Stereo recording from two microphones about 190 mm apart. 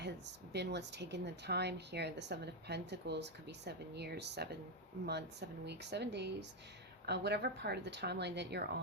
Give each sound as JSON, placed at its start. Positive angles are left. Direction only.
{"t": 0.0, "sound": "speech", "side_deg": -60}